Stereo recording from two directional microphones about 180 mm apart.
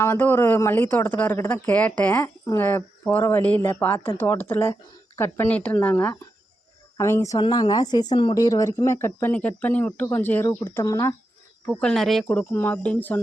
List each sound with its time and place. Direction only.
0.0 s a woman's voice: 10° left (ahead or behind)
11.8 s a woman's voice: 5° left (ahead or behind)